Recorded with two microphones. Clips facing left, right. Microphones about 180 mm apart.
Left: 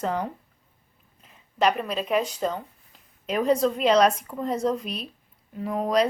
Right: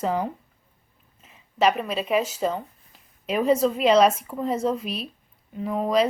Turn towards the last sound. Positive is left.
turn(degrees=0)  # may be behind; listen again after turning